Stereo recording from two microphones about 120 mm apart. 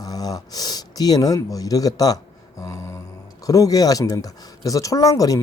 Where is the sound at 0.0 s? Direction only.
35° left (ahead or behind).